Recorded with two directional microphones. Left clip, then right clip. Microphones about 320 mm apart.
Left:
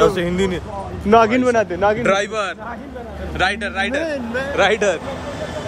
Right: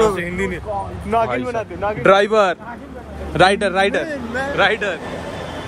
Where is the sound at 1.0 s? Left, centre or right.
Left.